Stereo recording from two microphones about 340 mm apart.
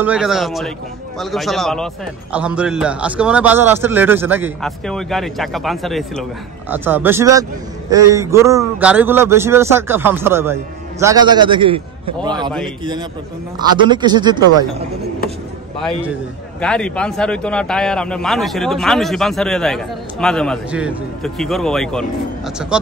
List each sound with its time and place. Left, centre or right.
0.0 s a man's voice: centre
13.6 s a man's voice: centre
16.6 s a man's voice: centre